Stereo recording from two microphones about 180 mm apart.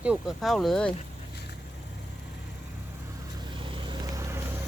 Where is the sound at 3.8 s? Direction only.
15° right (ahead or behind).